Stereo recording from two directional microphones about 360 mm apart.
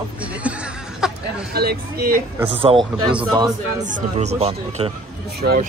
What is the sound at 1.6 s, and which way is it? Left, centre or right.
Speech, right.